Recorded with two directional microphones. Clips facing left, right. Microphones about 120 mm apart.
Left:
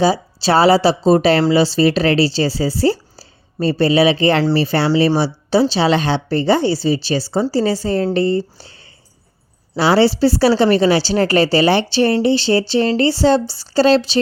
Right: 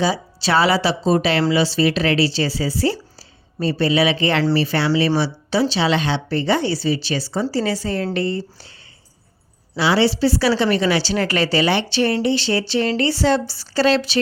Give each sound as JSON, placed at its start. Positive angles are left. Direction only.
{"t": 0.0, "sound": "speech", "side_deg": 35}
{"t": 9.7, "sound": "speech", "side_deg": 40}